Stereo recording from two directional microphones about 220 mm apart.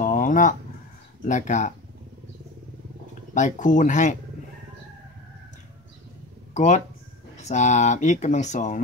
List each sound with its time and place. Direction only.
0.0 s fowl: 35° left (ahead or behind)
1.2 s speech: 35° left (ahead or behind)
3.3 s speech: 35° left (ahead or behind)
6.5 s speech: 30° left (ahead or behind)